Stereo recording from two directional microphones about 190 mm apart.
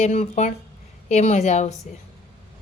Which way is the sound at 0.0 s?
35° left (ahead or behind).